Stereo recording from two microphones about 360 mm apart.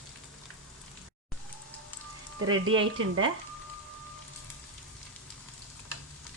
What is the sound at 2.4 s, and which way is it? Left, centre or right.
Speech, right.